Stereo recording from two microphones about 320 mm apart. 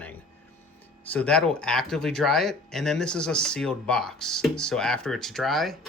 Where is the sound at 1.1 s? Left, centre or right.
Centre.